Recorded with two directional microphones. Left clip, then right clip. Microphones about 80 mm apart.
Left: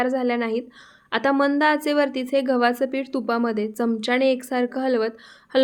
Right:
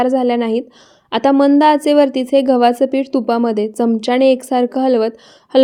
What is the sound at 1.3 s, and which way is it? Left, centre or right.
Speech, centre.